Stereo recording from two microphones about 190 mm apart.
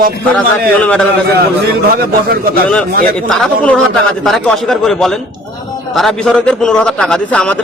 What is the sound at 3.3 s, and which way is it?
A man's voice, 5° left (ahead or behind).